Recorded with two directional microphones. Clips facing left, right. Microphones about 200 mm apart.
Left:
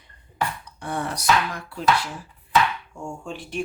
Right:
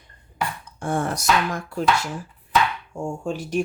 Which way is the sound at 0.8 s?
50° right (ahead or behind).